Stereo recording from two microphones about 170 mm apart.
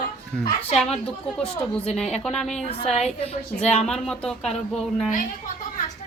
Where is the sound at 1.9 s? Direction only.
Centre (ahead or behind).